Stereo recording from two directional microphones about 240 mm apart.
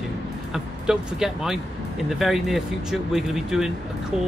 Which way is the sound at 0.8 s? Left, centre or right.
Centre.